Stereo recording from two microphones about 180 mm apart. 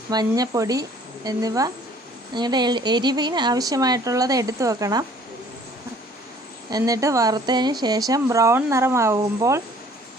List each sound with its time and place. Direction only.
0.1 s speech: 20° right (ahead or behind)
6.7 s speech: 20° right (ahead or behind)